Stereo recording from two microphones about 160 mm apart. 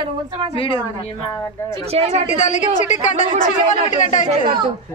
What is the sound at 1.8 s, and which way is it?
Speech, 40° right (ahead or behind).